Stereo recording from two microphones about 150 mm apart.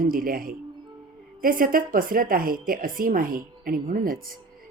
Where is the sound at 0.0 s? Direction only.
70° right (ahead or behind).